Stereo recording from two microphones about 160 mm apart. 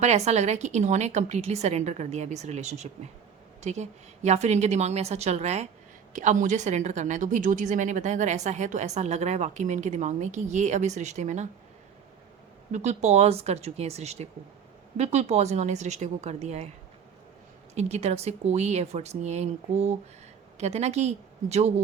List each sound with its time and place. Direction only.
0.0 s a woman's voice: 45° right (ahead or behind)
12.7 s a woman's voice: 45° right (ahead or behind)
17.7 s a woman's voice: 45° right (ahead or behind)